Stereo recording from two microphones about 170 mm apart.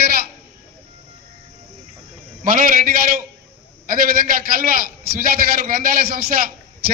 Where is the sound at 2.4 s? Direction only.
55° right (ahead or behind).